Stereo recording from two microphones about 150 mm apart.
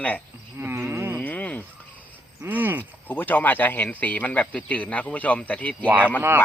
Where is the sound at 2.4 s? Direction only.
10° right (ahead or behind).